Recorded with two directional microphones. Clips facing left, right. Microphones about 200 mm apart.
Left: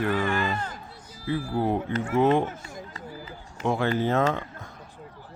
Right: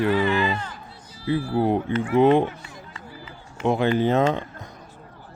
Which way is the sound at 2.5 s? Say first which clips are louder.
Left 1 dB; 45° left (ahead or behind).